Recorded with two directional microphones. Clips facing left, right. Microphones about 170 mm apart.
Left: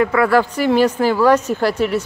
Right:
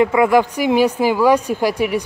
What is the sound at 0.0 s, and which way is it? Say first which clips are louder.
A woman's voice: right 1 dB; 15° right (ahead or behind).